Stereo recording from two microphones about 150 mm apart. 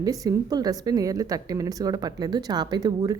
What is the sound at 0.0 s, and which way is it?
Speech, 25° right (ahead or behind).